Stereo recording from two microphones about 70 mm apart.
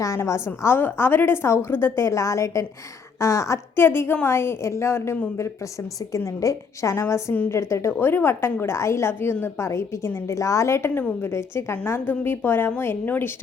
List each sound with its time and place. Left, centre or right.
0.2 s a woman's voice: left
3.8 s a woman's voice: left
6.1 s a woman's voice: left